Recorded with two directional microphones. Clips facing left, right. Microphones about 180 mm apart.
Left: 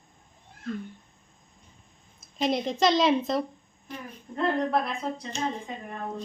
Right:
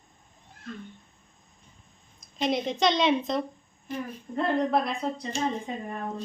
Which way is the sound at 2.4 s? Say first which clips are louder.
Left 1 dB; centre (ahead or behind).